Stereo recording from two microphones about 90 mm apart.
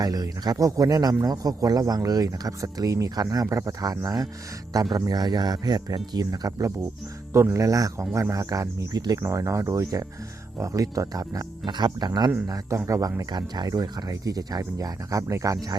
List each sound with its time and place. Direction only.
0.0 s a man's voice: 45° right (ahead or behind)
7.3 s a man's voice: 30° right (ahead or behind)
11.6 s a man's voice: 55° right (ahead or behind)
12.5 s a man's voice: 35° right (ahead or behind)